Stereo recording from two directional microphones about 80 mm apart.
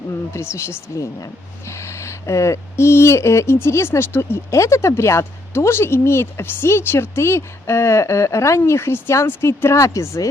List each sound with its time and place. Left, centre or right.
0.3 s speech: left